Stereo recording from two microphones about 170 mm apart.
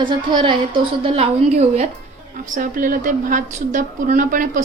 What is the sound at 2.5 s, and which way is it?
A woman's voice, 55° right (ahead or behind).